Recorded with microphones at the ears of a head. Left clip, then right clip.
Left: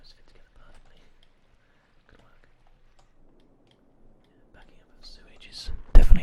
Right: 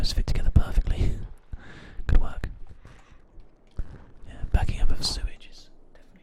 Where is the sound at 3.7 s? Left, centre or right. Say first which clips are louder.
Right 11 dB; right.